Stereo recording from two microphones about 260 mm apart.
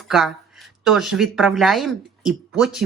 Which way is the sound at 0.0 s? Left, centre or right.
Centre.